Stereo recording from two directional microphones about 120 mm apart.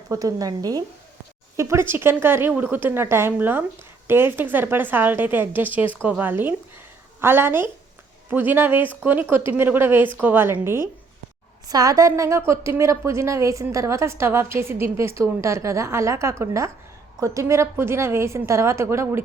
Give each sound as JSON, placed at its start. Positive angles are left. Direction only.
{"t": 0.1, "sound": "a woman's voice", "side_deg": -30}
{"t": 11.7, "sound": "a woman's voice", "side_deg": -30}